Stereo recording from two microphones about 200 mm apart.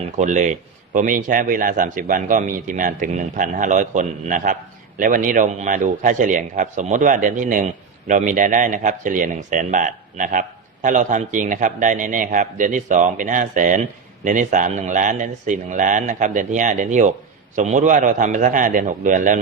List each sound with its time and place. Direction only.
0.0 s a man's voice: 35° right (ahead or behind)